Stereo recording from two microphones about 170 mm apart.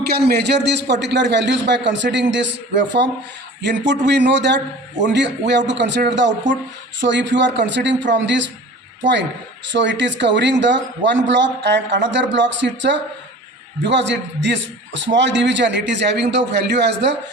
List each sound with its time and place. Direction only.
0.0 s a man's voice: 70° right (ahead or behind); by 8.4 s 90° right
9.6 s a man's voice: 90° right